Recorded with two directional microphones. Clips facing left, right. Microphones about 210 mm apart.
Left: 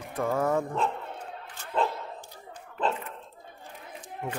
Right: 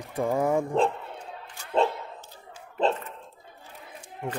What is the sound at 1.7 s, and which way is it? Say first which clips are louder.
Bow-wow: right 4 dB; 25° right (ahead or behind).